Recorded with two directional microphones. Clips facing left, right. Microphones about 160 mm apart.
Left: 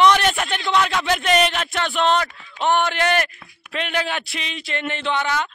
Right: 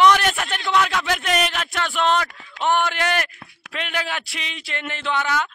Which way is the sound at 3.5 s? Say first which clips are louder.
Right 2 dB; 80° right.